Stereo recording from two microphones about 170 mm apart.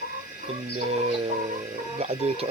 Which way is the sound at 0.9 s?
40° right (ahead or behind).